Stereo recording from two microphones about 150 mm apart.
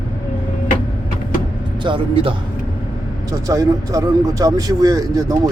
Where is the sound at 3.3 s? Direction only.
20° right (ahead or behind).